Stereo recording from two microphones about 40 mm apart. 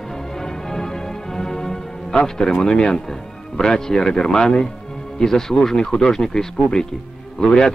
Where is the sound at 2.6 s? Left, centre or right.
Centre.